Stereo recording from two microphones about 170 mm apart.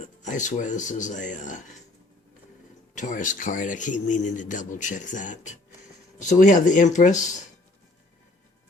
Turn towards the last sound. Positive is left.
turn(degrees=45)  # may be behind; listen again after turning